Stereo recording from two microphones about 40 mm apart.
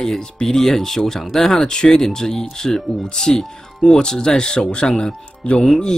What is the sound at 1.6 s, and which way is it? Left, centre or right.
Speech, centre.